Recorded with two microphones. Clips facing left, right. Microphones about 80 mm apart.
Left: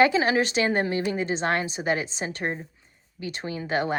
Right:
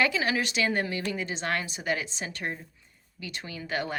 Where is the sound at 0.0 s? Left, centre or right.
Left.